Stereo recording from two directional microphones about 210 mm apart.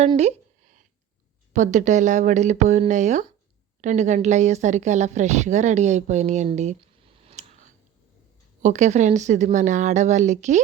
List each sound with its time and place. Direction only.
0.2 s a sound: 30° right (ahead or behind)
1.5 s a woman's voice: 35° right (ahead or behind)
7.3 s tick: 30° right (ahead or behind)
8.6 s a woman's voice: 35° right (ahead or behind)